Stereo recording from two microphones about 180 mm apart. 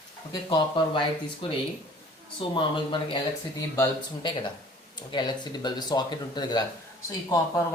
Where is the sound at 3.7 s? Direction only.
15° left (ahead or behind).